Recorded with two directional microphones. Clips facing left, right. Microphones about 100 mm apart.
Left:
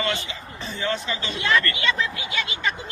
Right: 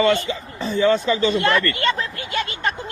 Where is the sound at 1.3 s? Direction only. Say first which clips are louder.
Right 4 dB; 55° right (ahead or behind).